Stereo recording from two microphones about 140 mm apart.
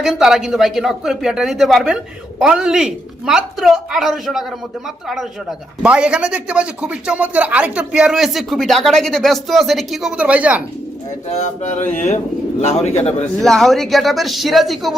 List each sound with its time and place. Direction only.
0.0 s speech: 5° right (ahead or behind)
11.3 s speech: 55° left (ahead or behind)
13.4 s speech: centre (ahead or behind)